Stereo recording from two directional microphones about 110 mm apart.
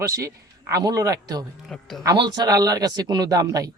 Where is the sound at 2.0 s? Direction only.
40° right (ahead or behind).